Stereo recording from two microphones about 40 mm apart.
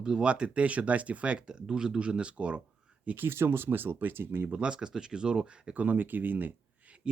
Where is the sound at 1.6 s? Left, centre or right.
Centre.